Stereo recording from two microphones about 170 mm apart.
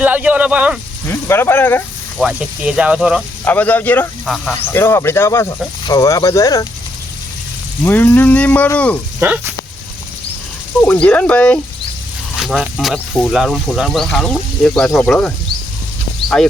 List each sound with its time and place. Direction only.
0.0 s speech: 10° right (ahead or behind)
1.0 s speech: 15° left (ahead or behind)
2.1 s speech: 5° right (ahead or behind)
3.4 s speech: 10° left (ahead or behind)
7.9 s speech: 10° left (ahead or behind)
9.2 s speech: 10° right (ahead or behind)
10.8 s speech: 5° left (ahead or behind)